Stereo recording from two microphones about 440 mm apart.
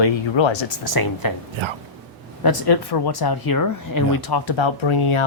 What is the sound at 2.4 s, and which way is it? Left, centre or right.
Speech, left.